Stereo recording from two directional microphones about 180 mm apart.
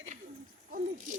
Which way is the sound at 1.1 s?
45° right (ahead or behind).